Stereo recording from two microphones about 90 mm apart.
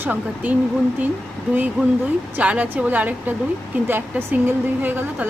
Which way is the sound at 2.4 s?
15° right (ahead or behind).